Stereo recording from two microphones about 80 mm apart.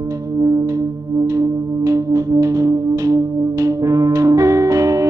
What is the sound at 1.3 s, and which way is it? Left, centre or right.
Music, right.